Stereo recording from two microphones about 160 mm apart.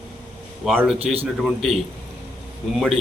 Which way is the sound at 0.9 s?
40° right (ahead or behind).